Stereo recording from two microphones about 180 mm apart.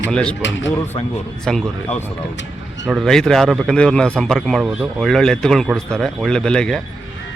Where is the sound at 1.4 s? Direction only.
5° left (ahead or behind).